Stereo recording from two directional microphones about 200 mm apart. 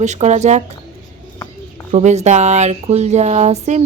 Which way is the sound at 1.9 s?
35° right (ahead or behind).